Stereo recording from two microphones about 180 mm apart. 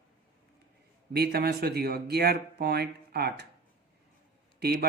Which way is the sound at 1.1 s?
60° right (ahead or behind).